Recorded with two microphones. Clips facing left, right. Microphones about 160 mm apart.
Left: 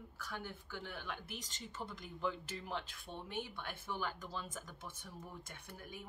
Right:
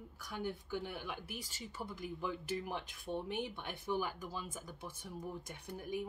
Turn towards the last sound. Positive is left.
turn(degrees=-15)  # may be behind; listen again after turning